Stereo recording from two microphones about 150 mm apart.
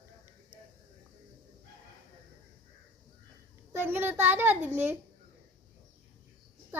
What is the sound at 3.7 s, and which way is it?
A child's voice, 15° right (ahead or behind).